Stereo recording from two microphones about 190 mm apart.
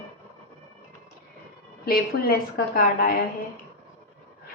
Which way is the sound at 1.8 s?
50° left (ahead or behind).